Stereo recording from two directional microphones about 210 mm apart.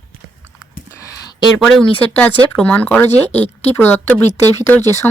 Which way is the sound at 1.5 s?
5° left (ahead or behind).